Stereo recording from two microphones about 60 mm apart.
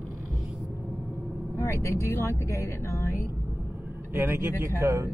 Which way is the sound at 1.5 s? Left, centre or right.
Left.